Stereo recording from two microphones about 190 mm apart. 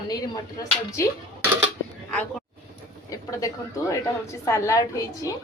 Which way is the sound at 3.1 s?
15° left (ahead or behind).